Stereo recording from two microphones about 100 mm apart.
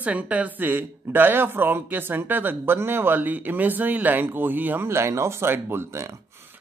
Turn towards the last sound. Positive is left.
turn(degrees=-30)  # may be behind; listen again after turning